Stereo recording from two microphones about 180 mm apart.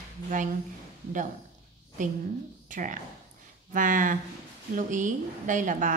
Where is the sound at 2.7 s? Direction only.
45° right (ahead or behind).